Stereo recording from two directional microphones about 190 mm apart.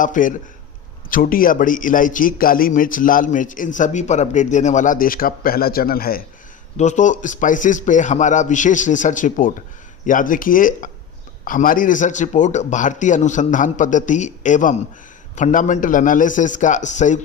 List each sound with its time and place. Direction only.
0.0 s a man's voice: 45° left (ahead or behind)
6.7 s a man's voice: 40° left (ahead or behind)